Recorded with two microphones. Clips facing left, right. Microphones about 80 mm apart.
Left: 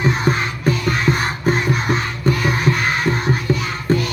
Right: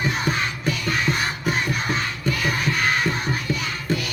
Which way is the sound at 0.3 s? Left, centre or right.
Left.